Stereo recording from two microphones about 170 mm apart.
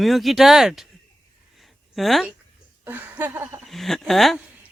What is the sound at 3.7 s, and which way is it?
Speech, centre (ahead or behind).